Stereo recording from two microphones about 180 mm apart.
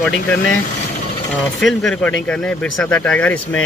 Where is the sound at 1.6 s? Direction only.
5° left (ahead or behind).